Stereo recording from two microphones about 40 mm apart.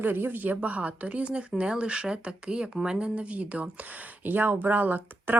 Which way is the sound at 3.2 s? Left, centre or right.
Right.